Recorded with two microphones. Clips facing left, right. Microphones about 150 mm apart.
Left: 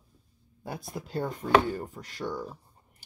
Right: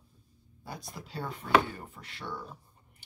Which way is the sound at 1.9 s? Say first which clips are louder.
Left 6 dB; 40° left (ahead or behind).